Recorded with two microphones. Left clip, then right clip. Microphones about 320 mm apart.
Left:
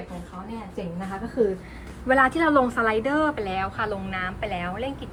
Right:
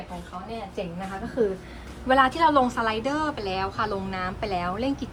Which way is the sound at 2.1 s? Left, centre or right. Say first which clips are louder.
Even; centre.